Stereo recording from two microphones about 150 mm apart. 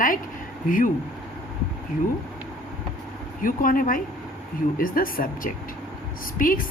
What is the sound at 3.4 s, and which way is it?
Speech, 70° left (ahead or behind).